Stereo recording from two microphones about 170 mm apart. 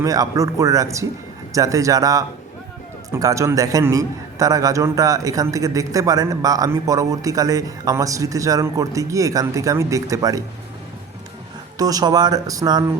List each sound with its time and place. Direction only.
0.0 s a man's voice: 20° right (ahead or behind)
11.8 s a man's voice: 20° right (ahead or behind)